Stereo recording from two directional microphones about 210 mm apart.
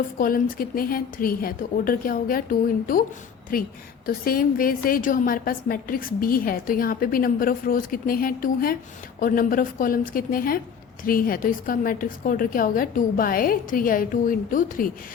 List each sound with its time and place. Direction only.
0.2 s a woman's voice: 40° left (ahead or behind)